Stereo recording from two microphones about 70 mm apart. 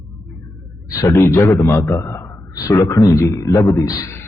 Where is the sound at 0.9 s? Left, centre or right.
Left.